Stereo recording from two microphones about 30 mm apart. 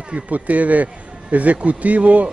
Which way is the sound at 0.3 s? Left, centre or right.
Right.